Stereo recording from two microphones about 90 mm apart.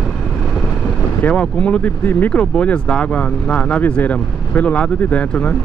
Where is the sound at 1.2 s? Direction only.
10° left (ahead or behind).